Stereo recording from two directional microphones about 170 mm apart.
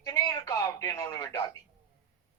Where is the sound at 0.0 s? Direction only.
20° left (ahead or behind).